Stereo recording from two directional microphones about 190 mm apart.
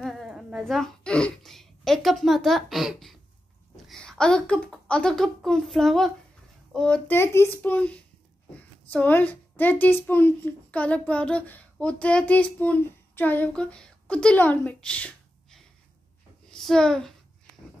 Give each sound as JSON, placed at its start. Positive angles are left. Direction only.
{"t": 0.0, "sound": "a woman's voice", "side_deg": 0}